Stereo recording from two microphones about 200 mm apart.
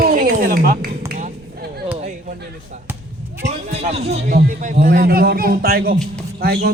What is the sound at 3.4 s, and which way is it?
Speech, 35° right (ahead or behind).